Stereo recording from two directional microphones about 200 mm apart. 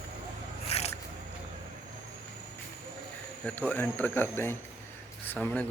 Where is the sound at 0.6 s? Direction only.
30° left (ahead or behind).